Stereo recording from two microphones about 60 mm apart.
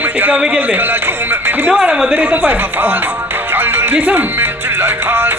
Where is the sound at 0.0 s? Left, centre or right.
Right.